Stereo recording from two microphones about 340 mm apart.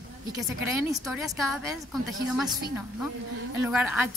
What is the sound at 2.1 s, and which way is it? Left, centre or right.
Speech, centre.